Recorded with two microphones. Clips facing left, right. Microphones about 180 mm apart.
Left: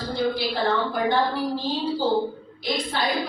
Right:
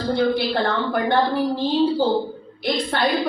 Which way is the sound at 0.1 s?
60° right (ahead or behind).